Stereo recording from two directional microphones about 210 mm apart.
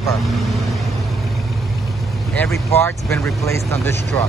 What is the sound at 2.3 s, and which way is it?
Speech, 5° left (ahead or behind).